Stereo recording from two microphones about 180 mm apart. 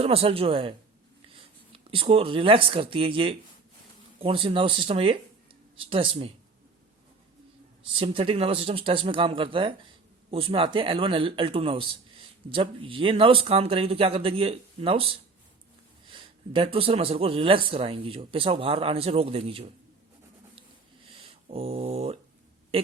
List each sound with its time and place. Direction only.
0.0 s a man's voice: 30° right (ahead or behind)
7.9 s a man's voice: 30° right (ahead or behind)
21.1 s speech: 30° right (ahead or behind)